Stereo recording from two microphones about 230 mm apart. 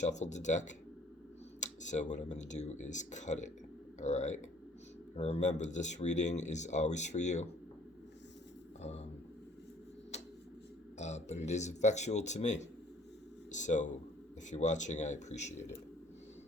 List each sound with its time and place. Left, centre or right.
0.0 s speech: left
1.6 s speech: left
8.8 s speech: left
10.1 s tick-tock: left
10.9 s speech: left